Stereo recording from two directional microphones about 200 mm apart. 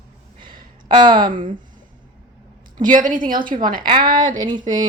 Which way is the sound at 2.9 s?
40° right (ahead or behind).